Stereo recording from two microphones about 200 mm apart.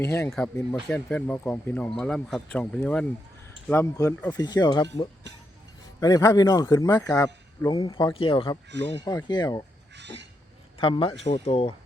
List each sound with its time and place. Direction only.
0.0 s speech: 15° left (ahead or behind)
9.9 s a sound: 60° right (ahead or behind)
10.8 s speech: 25° left (ahead or behind)